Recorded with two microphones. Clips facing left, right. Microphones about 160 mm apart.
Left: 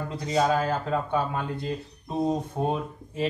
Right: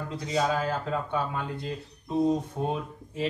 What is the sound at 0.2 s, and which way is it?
Speech, 45° left (ahead or behind).